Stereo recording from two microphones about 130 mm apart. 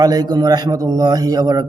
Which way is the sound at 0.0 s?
30° right (ahead or behind).